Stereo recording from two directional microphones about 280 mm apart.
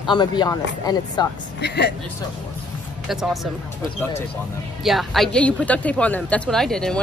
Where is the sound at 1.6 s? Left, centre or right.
Left.